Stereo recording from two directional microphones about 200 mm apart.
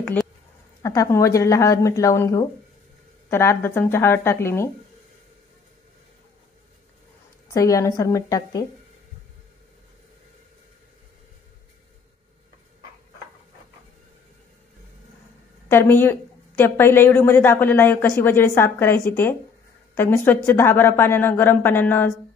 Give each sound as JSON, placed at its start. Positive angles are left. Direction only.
{"t": 0.8, "sound": "a woman's voice", "side_deg": 15}
{"t": 7.5, "sound": "a woman's voice", "side_deg": 15}
{"t": 15.7, "sound": "a woman's voice", "side_deg": 10}